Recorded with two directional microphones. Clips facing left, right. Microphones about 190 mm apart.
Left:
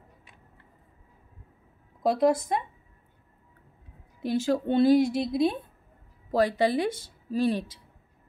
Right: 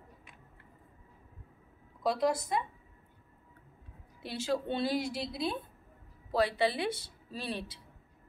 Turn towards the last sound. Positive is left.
turn(degrees=45)  # may be behind; listen again after turning